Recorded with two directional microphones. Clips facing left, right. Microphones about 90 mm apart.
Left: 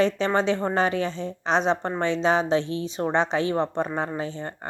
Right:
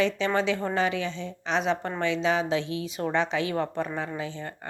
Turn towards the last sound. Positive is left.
turn(degrees=35)  # may be behind; listen again after turning